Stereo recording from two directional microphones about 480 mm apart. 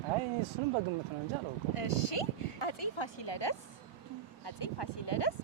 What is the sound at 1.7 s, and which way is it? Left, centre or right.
Speech, left.